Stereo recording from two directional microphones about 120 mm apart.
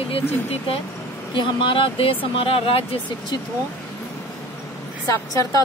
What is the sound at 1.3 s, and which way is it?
Speech, 45° left (ahead or behind).